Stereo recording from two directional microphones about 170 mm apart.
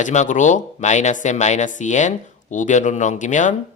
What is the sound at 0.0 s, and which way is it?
Speech, 45° left (ahead or behind).